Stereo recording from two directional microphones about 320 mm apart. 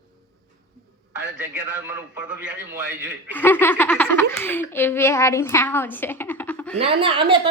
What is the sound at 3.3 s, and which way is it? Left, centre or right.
A child's voice, centre.